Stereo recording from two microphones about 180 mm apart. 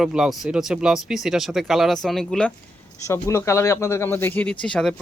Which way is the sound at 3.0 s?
15° left (ahead or behind).